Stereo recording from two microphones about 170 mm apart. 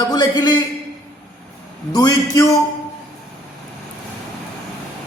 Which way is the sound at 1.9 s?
20° left (ahead or behind).